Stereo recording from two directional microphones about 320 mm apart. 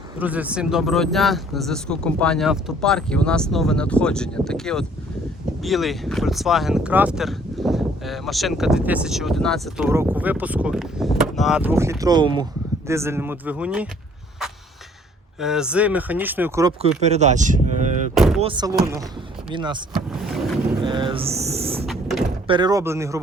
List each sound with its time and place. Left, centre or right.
0.2 s speech: centre
15.4 s speech: centre; by 17.9 s right
18.1 s vehicle: centre
18.3 s speech: centre
20.8 s a sound: centre
21.8 s mechanisms: centre
22.4 s speech: centre